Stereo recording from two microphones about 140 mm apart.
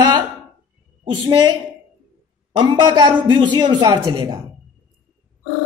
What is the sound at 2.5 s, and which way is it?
Speech, 35° right (ahead or behind).